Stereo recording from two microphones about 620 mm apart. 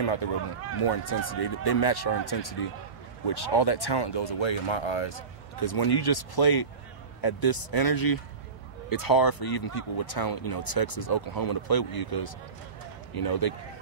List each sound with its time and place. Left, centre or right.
0.0 s speech: left